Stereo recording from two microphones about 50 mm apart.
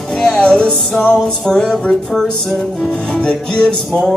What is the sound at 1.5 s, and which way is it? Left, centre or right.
Music, centre.